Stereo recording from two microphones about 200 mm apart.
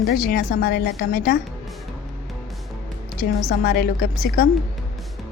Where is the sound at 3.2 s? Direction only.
50° left (ahead or behind).